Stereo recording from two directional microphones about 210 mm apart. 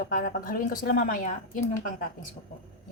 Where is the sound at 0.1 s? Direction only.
40° left (ahead or behind).